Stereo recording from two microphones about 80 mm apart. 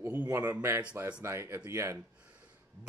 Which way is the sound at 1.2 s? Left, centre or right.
Right.